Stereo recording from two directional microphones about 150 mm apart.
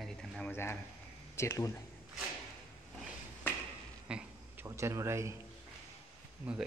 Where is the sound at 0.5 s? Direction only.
15° left (ahead or behind).